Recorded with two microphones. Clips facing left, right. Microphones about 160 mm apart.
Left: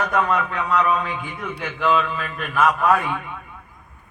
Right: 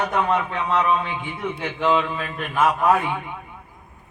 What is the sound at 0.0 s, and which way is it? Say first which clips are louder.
Speech: even; 30° right (ahead or behind).